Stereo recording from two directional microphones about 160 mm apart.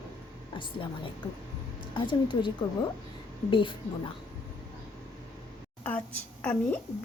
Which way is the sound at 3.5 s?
30° left (ahead or behind).